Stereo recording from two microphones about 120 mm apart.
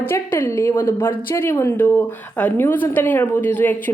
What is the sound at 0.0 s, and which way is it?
A woman's voice, 20° left (ahead or behind).